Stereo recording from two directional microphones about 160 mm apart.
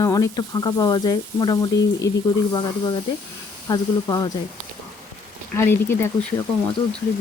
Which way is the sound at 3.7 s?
20° left (ahead or behind).